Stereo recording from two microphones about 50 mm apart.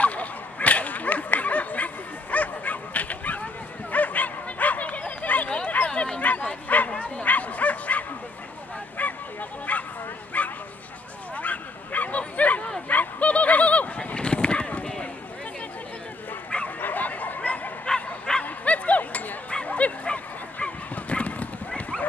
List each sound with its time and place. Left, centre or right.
0.0 s dog: left
2.3 s bow-wow: left
5.9 s bow-wow: left
9.0 s honk: left
9.7 s bow-wow: left
12.8 s a sound: left
16.4 s bow-wow: left
16.8 s bow-wow: left; by 18.4 s centre
18.4 s a sound: left